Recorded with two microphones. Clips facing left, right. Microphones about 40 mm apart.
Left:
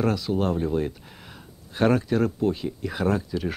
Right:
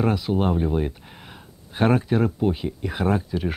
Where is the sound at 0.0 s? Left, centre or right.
Centre.